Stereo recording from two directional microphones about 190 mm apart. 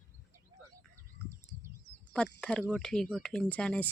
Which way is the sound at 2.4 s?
5° left (ahead or behind).